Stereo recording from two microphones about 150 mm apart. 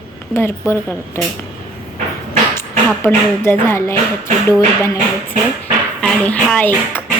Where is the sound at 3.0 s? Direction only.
15° left (ahead or behind).